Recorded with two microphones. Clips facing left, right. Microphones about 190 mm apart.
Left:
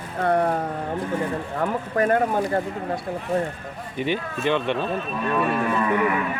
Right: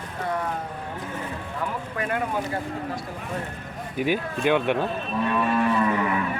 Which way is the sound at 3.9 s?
5° right (ahead or behind).